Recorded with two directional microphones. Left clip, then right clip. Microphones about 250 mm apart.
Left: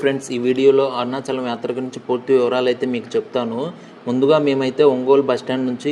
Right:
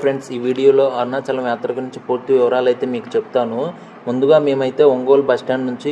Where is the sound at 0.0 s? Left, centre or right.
Centre.